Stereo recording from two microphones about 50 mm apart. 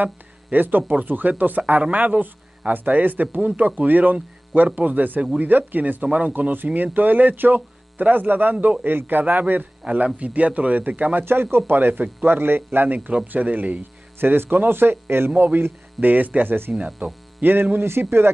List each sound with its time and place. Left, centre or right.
0.0 s speech: right
11.5 s speech: right
14.2 s a man's voice: right
17.4 s a man's voice: right